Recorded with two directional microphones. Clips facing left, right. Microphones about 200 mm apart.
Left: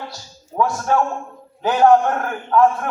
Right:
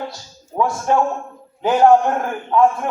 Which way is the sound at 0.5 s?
20° right (ahead or behind).